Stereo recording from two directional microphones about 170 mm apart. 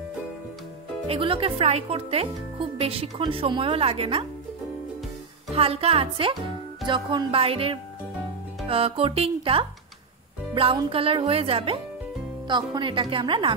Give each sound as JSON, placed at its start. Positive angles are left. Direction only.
{"t": 1.0, "sound": "speech", "side_deg": -30}
{"t": 5.5, "sound": "a woman's voice", "side_deg": -35}